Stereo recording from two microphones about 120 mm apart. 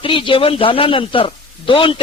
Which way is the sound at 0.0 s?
45° left (ahead or behind).